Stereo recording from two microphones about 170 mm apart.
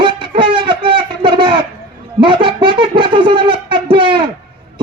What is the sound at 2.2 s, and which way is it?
Speech, 30° right (ahead or behind).